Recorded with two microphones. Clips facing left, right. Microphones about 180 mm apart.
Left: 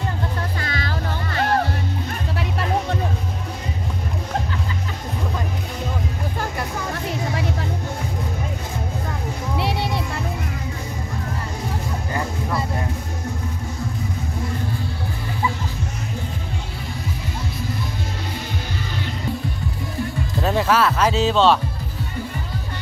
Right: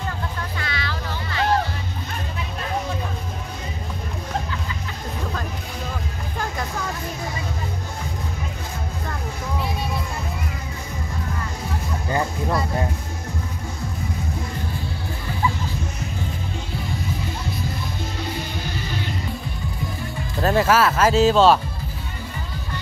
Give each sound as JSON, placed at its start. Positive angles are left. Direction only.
{"t": 0.6, "sound": "music", "side_deg": 45}
{"t": 9.6, "sound": "music", "side_deg": 80}
{"t": 20.4, "sound": "speech", "side_deg": -5}